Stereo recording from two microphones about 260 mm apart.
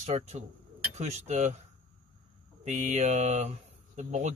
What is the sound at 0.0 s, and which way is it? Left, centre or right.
Speech, right.